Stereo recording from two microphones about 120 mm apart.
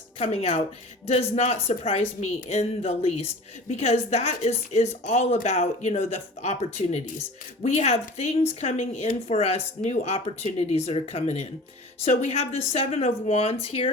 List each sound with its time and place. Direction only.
0.2 s speech: 60° left (ahead or behind)
8.6 s speech: 80° left; by 13.9 s 50° left (ahead or behind)